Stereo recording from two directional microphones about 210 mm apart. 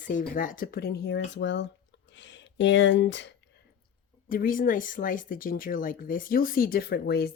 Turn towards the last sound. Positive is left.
turn(degrees=50)  # may be behind; listen again after turning